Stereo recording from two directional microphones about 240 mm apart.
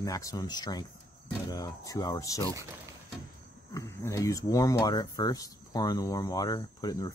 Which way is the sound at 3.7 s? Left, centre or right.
Centre.